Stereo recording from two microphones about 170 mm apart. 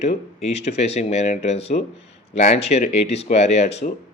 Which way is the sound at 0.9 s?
40° left (ahead or behind).